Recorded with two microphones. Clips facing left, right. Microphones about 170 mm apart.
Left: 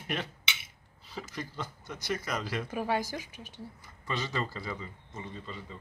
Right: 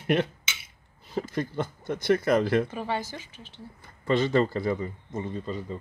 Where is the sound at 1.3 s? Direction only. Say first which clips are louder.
Right 8 dB; 55° right (ahead or behind).